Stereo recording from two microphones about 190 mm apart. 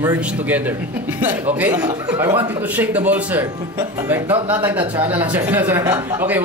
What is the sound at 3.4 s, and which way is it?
Speech, 20° right (ahead or behind).